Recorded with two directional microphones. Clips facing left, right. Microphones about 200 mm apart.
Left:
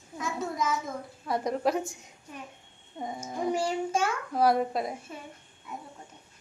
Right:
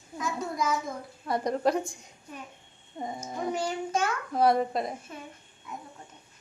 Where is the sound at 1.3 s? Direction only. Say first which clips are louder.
Right 1 dB; centre (ahead or behind).